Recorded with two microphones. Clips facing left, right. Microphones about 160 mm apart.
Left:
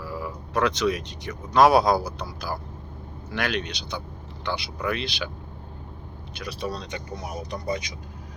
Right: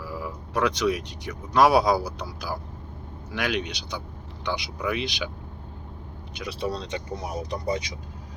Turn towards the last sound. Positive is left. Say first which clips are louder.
# right 1 dB
turn(degrees=-30)  # may be behind; listen again after turning